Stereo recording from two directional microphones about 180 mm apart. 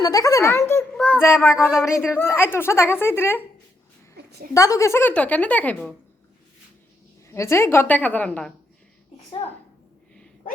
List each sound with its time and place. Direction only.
0.0 s a woman's voice: 20° left (ahead or behind)
1.5 s speech: 5° right (ahead or behind)
2.1 s a woman's voice: 15° left (ahead or behind)
4.2 s a sound: 65° right (ahead or behind)
4.5 s a woman's voice: 20° left (ahead or behind)
7.3 s a woman's voice: 15° left (ahead or behind)